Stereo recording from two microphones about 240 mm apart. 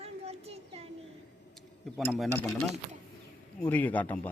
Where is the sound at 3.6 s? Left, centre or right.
Centre.